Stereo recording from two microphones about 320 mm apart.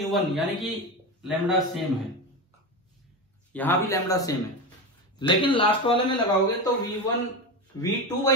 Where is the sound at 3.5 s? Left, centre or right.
Centre.